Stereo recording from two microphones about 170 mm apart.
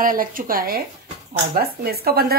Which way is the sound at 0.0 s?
55° right (ahead or behind).